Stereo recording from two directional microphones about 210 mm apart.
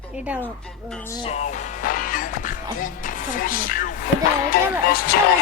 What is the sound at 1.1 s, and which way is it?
Music, 30° left (ahead or behind).